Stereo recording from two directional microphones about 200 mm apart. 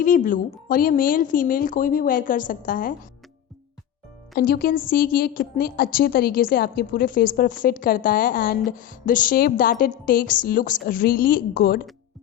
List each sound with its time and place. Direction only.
0.0 s a woman's voice: 40° left (ahead or behind)
4.4 s a woman's voice: 50° left (ahead or behind)